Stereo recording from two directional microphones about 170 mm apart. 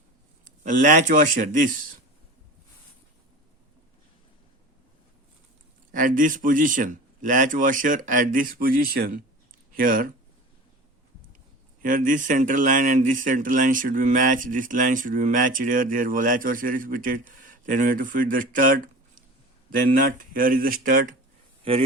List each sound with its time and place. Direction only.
0.4 s speech: 50° right (ahead or behind)
5.9 s speech: 50° right (ahead or behind)
11.8 s speech: 55° right (ahead or behind)
21.6 s a man's voice: 35° right (ahead or behind)